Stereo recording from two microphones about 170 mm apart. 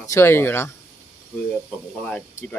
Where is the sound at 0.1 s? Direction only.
15° left (ahead or behind).